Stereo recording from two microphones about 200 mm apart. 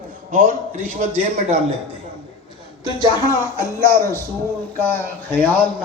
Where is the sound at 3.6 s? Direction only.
15° left (ahead or behind).